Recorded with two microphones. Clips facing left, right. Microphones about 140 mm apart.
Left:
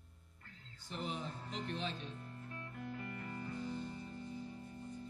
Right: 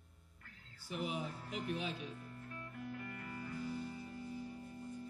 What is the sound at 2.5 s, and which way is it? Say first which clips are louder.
Music: even; 25° left (ahead or behind).